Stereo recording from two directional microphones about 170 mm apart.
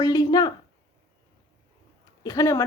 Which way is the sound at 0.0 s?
20° left (ahead or behind).